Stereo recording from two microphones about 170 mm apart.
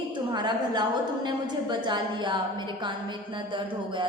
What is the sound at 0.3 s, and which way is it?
A woman's voice, 25° right (ahead or behind).